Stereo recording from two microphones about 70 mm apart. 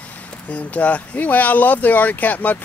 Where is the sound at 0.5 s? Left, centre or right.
Centre.